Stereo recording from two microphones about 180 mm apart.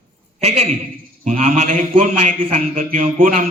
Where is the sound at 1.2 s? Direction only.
45° right (ahead or behind).